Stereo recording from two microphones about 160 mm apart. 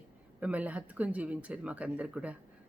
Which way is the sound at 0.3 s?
10° right (ahead or behind).